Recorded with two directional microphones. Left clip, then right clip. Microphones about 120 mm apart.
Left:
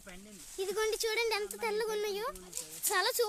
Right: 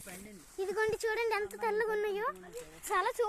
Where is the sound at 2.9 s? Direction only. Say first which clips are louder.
Even; 55° left (ahead or behind).